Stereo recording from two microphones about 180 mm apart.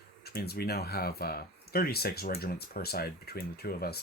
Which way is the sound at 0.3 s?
60° left (ahead or behind).